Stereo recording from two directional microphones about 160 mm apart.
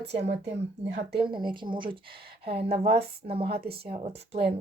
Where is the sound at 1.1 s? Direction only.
30° right (ahead or behind).